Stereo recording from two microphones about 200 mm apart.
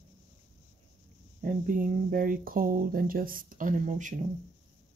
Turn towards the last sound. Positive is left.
turn(degrees=-35)  # may be behind; listen again after turning